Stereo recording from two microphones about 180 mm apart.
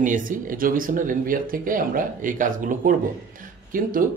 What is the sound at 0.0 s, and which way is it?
Speech, 50° right (ahead or behind).